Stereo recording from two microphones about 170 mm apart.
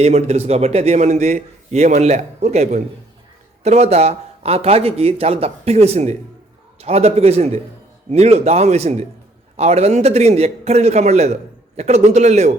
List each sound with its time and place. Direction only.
0.0 s a man's voice: 40° right (ahead or behind)